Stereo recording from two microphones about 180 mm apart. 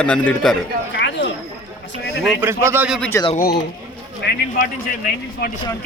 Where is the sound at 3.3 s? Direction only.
55° left (ahead or behind).